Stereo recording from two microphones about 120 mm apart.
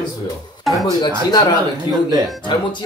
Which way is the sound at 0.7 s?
Centre (ahead or behind).